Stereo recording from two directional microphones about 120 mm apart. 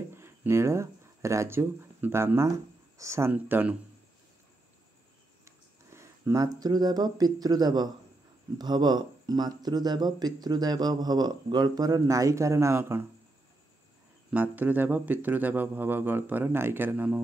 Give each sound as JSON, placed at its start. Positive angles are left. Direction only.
{"t": 0.1, "sound": "speech", "side_deg": -20}
{"t": 5.9, "sound": "speech", "side_deg": -25}
{"t": 14.3, "sound": "speech", "side_deg": -15}